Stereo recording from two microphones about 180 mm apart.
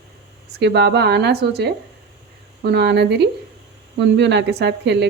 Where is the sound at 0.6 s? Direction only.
65° right (ahead or behind).